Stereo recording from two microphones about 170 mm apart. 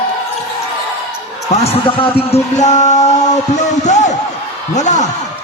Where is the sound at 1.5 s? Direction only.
35° left (ahead or behind).